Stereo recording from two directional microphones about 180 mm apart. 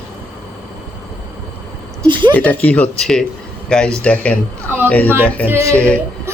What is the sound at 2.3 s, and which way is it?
Speech, 10° left (ahead or behind).